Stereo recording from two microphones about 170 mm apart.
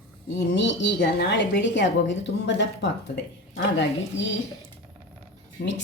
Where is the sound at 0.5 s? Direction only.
90° left.